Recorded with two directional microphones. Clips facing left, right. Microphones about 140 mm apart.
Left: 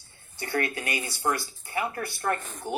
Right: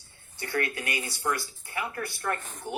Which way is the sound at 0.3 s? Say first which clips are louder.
Left 2 dB; 30° left (ahead or behind).